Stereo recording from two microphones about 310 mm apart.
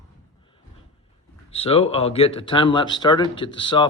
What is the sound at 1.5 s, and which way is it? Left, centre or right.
Speech, centre.